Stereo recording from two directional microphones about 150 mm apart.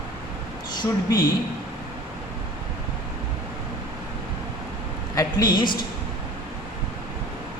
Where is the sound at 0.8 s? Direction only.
25° left (ahead or behind).